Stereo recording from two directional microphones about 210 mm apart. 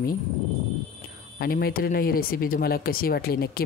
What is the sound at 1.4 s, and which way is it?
Speech, 45° left (ahead or behind).